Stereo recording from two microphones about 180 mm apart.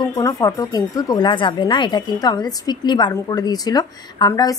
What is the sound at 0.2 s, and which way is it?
A woman's voice, 15° left (ahead or behind).